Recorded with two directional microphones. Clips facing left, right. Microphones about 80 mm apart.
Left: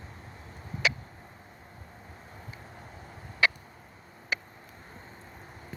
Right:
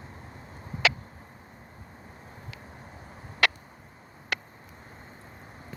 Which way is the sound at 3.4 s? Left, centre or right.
Right.